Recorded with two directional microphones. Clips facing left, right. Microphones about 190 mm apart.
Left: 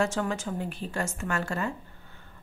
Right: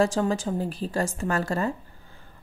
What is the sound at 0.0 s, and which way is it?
Speech, 35° right (ahead or behind).